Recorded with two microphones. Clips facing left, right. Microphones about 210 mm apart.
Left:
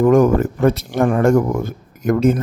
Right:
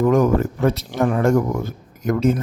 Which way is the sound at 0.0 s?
50° left (ahead or behind).